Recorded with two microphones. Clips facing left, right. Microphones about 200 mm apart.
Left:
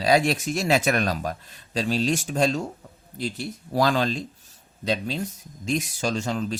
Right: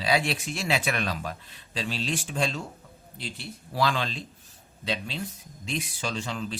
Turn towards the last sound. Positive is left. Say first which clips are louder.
# left 6 dB
turn(degrees=45)  # may be behind; listen again after turning